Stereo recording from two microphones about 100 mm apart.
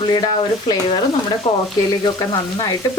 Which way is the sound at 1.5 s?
75° left (ahead or behind).